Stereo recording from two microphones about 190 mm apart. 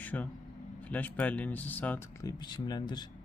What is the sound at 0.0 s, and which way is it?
Vehicle, 10° left (ahead or behind).